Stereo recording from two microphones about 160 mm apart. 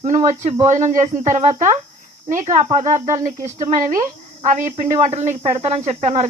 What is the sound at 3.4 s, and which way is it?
Speech, 50° right (ahead or behind).